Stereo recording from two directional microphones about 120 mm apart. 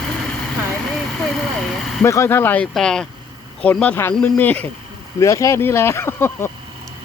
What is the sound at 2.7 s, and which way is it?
Speech, 5° left (ahead or behind).